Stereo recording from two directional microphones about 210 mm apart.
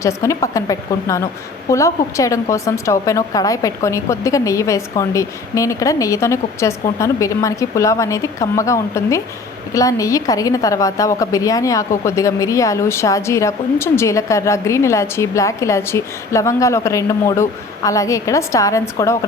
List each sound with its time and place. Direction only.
0.0 s speech: 15° left (ahead or behind)